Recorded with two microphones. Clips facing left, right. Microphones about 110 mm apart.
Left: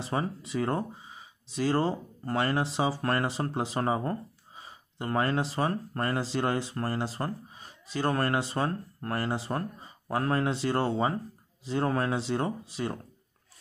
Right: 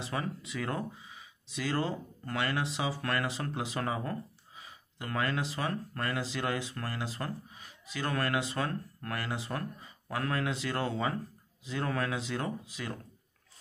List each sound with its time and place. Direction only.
0.0 s speech: 35° left (ahead or behind)